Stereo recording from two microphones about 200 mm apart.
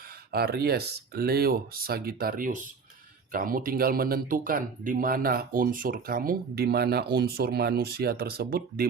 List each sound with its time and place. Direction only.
0.3 s speech: 50° right (ahead or behind)